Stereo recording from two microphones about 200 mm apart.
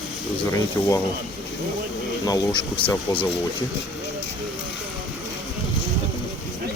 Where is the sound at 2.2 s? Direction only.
20° left (ahead or behind).